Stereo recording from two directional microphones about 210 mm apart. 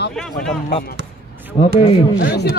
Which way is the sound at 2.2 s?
50° left (ahead or behind).